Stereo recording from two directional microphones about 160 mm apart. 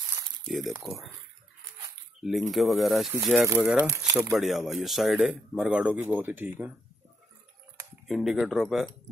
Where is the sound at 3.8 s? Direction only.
15° right (ahead or behind).